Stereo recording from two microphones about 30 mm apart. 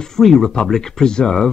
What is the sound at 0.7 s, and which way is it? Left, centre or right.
Speech, centre.